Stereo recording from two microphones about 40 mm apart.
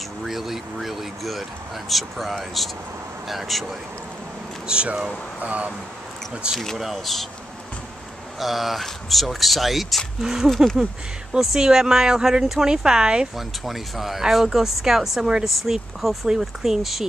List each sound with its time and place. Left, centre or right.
0.2 s speech: centre
4.7 s speech: right
5.4 s speech: right
6.4 s speech: right
6.8 s speech: centre
8.4 s speech: centre
13.4 s speech: centre